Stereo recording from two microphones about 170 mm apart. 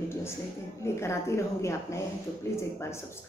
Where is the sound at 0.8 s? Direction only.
15° left (ahead or behind).